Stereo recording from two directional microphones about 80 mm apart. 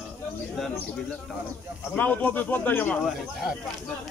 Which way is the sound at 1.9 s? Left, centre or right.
Left.